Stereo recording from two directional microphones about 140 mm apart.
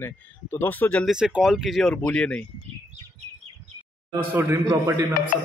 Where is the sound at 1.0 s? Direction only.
5° right (ahead or behind).